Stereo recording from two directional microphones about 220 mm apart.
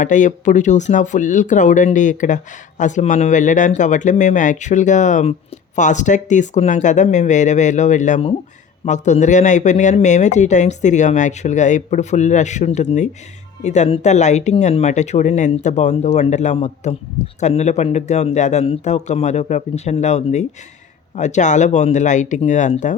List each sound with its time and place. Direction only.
0.0 s speech: 35° left (ahead or behind)